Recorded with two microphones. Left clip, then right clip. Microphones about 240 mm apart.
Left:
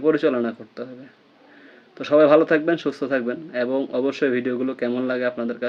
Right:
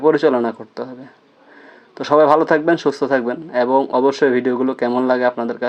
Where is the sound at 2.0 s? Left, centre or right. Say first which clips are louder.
Right 2 dB; centre.